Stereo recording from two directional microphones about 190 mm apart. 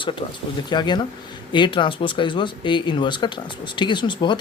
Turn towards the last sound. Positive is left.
turn(degrees=25)  # may be behind; listen again after turning